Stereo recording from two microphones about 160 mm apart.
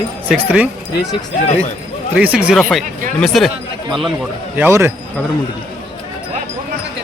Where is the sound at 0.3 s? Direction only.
10° right (ahead or behind).